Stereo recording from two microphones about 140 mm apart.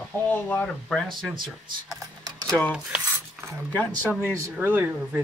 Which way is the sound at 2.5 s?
10° left (ahead or behind).